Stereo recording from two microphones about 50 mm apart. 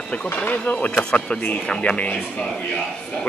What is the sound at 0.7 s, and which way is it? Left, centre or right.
Speech, left.